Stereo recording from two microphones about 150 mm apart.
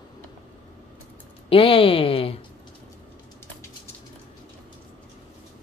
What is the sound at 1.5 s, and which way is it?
Speech, 35° left (ahead or behind).